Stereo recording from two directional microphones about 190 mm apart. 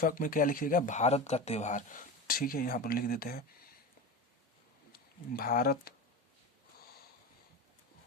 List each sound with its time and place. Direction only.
0.0 s speech: 45° left (ahead or behind)
4.9 s speech: 50° left (ahead or behind)